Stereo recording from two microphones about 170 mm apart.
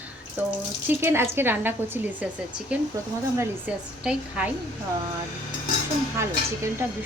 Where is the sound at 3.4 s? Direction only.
10° right (ahead or behind).